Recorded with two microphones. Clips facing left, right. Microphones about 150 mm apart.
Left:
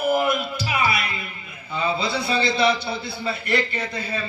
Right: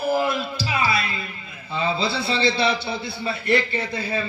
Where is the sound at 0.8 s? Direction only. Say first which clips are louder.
Even; 30° right (ahead or behind).